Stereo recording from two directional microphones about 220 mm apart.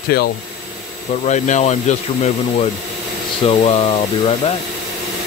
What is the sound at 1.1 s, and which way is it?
Speech, 35° left (ahead or behind).